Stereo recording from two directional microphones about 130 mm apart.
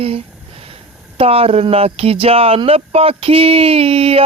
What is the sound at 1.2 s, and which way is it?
Speech, 45° right (ahead or behind).